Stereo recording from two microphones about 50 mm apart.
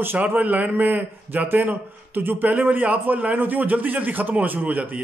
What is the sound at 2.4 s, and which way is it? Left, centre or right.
A man's voice, right.